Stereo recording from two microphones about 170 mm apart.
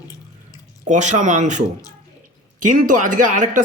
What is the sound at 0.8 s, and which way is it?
Speech, 45° right (ahead or behind).